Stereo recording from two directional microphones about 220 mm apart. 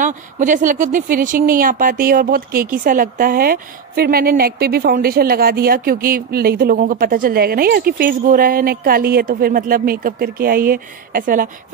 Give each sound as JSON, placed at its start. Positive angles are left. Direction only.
{"t": 0.0, "sound": "speech", "side_deg": -35}